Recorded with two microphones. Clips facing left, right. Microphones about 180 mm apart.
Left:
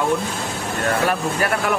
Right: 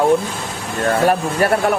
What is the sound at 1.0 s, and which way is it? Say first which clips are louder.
Speech: right 5 dB; 30° right (ahead or behind).